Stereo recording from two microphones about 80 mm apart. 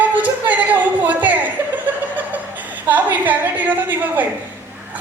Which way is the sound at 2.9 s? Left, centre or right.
Right.